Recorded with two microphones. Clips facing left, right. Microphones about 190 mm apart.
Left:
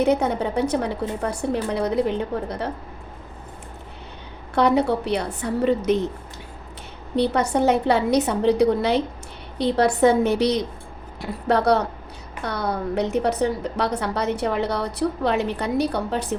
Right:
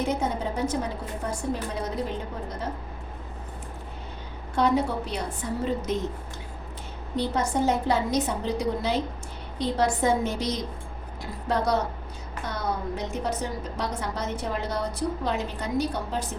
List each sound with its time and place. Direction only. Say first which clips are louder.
0.0 s a woman's voice: left 7 dB; 65° left (ahead or behind)
4.5 s a woman's voice: left 5 dB; 70° left (ahead or behind)
7.2 s a woman's voice: left 6 dB; 65° left (ahead or behind)